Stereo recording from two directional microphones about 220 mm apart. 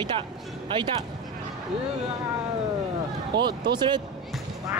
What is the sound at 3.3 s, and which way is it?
Speech, 20° right (ahead or behind).